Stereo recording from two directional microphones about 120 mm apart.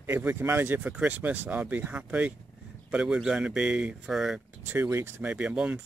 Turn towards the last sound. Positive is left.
turn(degrees=-10)  # may be behind; listen again after turning